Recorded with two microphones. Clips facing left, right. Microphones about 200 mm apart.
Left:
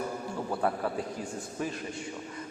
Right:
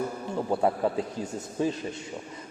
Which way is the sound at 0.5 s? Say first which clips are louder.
Right 5 dB; 20° right (ahead or behind).